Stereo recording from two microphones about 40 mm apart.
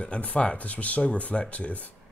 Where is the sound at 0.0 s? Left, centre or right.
Left.